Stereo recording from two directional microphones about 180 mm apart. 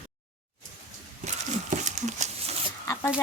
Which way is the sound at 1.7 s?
40° right (ahead or behind).